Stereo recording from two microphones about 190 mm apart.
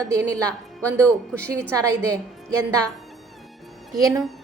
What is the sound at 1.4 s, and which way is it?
Speech, 15° right (ahead or behind).